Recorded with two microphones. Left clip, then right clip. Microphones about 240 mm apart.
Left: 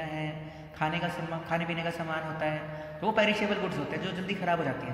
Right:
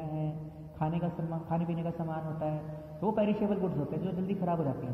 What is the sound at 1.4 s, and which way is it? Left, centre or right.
A man's voice, left.